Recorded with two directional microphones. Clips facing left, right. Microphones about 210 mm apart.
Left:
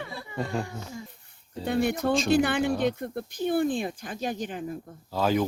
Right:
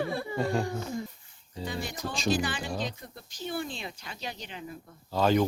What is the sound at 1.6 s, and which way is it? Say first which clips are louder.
Speech: left 10 dB; 60° left (ahead or behind).